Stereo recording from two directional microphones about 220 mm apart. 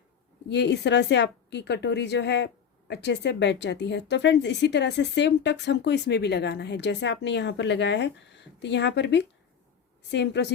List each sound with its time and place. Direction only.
0.4 s a woman's voice: 50° left (ahead or behind)